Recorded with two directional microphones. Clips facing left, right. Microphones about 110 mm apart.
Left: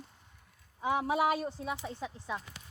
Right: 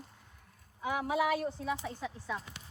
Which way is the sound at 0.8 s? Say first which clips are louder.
Left 2 dB; 30° left (ahead or behind).